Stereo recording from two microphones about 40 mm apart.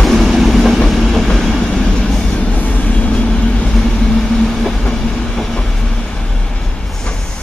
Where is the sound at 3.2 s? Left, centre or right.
Left; by 4.8 s centre.